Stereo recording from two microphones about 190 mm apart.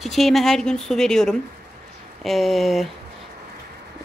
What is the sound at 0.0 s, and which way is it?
A woman's voice, centre (ahead or behind).